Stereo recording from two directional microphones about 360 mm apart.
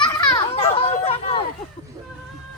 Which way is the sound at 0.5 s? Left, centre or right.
Centre.